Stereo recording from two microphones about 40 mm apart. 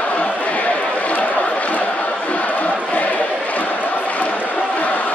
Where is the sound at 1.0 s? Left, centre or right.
Left.